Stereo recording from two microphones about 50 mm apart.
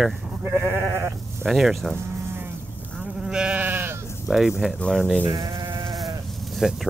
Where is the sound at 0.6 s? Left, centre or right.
Right.